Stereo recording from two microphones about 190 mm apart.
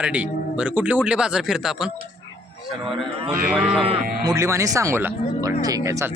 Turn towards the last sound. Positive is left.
turn(degrees=-15)  # may be behind; listen again after turning